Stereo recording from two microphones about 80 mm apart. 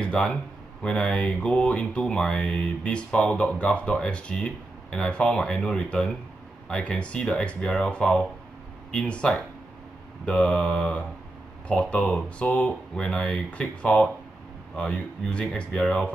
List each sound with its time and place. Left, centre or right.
0.0 s speech: centre